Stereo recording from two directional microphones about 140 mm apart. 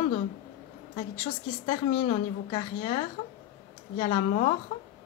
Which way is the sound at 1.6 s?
50° left (ahead or behind).